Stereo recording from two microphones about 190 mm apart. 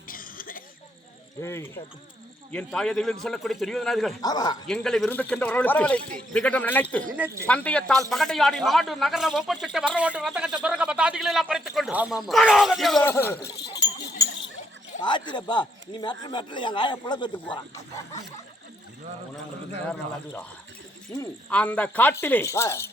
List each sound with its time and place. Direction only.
0.1 s throat clearing: 45° left (ahead or behind)
1.4 s a man's voice: 15° left (ahead or behind)
4.2 s speech: 20° left (ahead or behind)
4.6 s a man's voice: 5° left (ahead or behind)
14.2 s a sound: 15° left (ahead or behind)
15.0 s speech: 25° left (ahead or behind)
19.9 s speech: 5° left (ahead or behind)
21.5 s speech: 5° left (ahead or behind)